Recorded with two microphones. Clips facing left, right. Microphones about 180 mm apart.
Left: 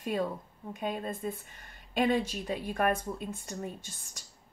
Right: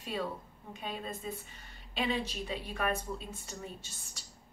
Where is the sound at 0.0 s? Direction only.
50° left (ahead or behind).